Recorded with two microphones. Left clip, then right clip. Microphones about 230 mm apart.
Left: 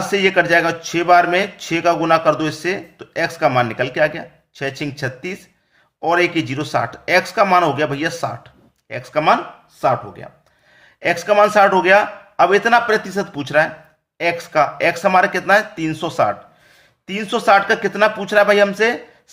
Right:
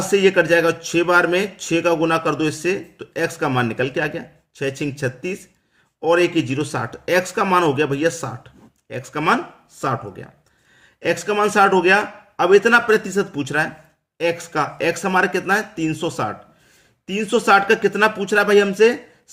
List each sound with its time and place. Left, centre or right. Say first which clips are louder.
0.0 s speech: even; centre